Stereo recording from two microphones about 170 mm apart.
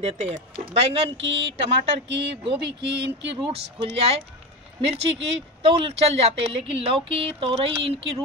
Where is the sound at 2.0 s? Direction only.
90° right.